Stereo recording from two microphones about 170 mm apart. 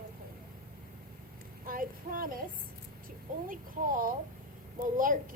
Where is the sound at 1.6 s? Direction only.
55° right (ahead or behind).